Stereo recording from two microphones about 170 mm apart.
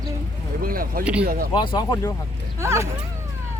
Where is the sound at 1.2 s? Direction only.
60° right (ahead or behind).